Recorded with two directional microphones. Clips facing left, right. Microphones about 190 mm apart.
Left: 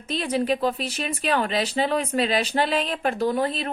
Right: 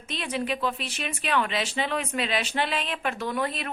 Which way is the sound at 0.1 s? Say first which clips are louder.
Left 6 dB; 35° left (ahead or behind).